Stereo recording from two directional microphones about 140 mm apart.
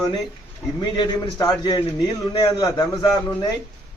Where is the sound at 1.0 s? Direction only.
30° left (ahead or behind).